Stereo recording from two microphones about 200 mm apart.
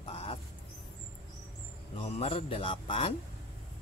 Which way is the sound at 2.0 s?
30° left (ahead or behind).